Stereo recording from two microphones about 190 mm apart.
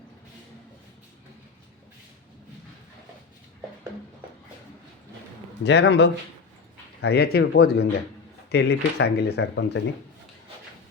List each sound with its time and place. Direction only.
5.6 s speech: 65° left (ahead or behind)